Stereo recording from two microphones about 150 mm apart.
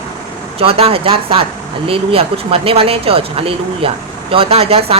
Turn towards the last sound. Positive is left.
turn(degrees=-40)  # may be behind; listen again after turning